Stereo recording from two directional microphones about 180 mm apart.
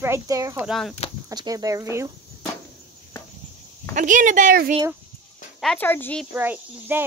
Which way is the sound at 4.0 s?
45° right (ahead or behind).